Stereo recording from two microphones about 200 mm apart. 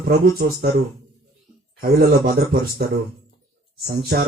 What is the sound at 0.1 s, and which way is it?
Speech, 50° right (ahead or behind).